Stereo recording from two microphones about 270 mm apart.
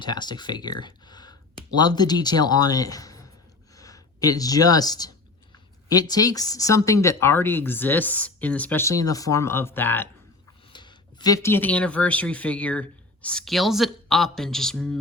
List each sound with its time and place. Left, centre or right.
0.0 s speech: centre